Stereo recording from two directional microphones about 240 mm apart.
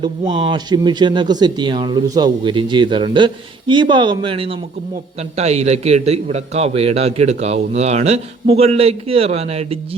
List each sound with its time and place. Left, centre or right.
0.0 s speech: centre